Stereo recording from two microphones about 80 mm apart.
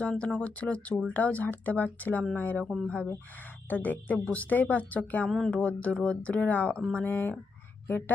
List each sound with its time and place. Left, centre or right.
0.0 s speech: centre
3.7 s speech: left